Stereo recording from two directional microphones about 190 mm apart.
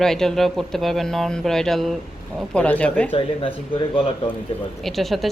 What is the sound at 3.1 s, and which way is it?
Speech, 30° left (ahead or behind).